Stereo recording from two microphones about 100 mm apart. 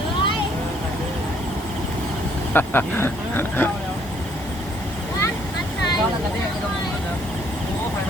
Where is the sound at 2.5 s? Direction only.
20° left (ahead or behind).